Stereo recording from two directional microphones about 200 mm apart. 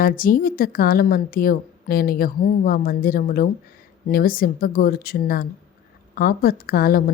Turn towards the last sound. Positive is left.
turn(degrees=45)  # may be behind; listen again after turning